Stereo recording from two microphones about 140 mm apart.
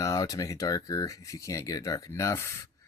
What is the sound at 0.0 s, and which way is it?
Speech, 25° left (ahead or behind).